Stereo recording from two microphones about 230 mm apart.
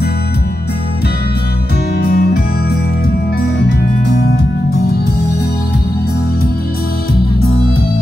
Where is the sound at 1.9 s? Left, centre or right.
Left.